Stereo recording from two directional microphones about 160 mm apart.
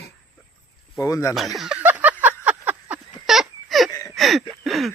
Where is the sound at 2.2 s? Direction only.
10° right (ahead or behind).